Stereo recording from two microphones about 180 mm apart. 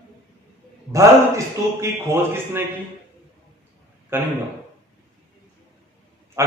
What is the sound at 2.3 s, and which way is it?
Speech, 15° right (ahead or behind).